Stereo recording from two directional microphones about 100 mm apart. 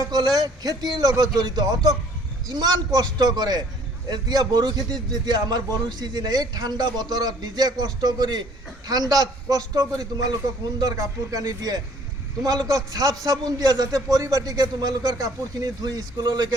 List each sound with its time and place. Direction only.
0.1 s a man's voice: 45° right (ahead or behind)